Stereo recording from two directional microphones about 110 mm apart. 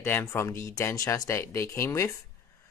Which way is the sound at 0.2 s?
25° left (ahead or behind).